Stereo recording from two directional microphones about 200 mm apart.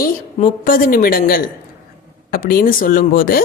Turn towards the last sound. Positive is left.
turn(degrees=45)  # may be behind; listen again after turning